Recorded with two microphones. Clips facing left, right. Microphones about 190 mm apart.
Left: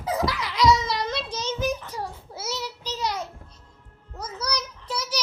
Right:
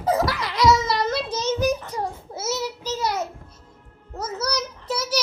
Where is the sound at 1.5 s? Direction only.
45° right (ahead or behind).